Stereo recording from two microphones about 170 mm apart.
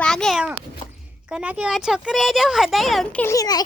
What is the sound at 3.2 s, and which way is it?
Speech, 20° left (ahead or behind).